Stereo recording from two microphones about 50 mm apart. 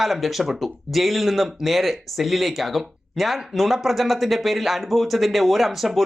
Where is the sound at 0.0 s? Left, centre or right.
Centre.